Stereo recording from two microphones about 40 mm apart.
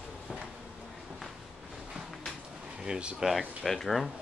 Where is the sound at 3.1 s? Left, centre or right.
Centre.